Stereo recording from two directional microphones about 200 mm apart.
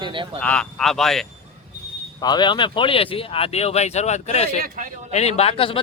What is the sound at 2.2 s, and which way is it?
Speech, 20° left (ahead or behind).